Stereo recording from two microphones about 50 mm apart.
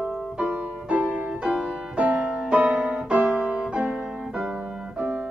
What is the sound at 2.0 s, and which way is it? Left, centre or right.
Music, right.